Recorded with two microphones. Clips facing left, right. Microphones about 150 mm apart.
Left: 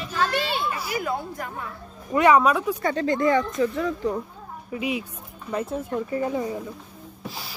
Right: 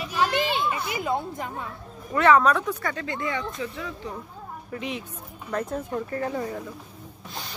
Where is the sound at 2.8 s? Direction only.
30° left (ahead or behind).